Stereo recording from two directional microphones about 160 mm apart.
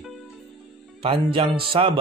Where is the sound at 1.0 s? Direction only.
35° right (ahead or behind).